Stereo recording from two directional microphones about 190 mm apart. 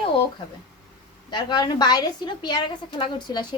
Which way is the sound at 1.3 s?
20° left (ahead or behind).